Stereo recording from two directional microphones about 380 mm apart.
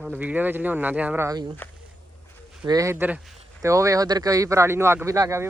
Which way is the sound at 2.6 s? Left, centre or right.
Centre.